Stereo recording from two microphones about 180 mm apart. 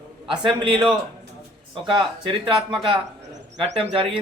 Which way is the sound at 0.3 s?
25° right (ahead or behind).